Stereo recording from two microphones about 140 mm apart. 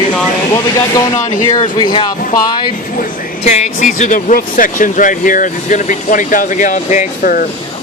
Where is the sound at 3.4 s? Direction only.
55° left (ahead or behind).